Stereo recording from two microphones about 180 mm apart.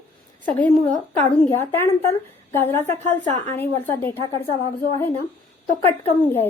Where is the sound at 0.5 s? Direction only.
10° left (ahead or behind).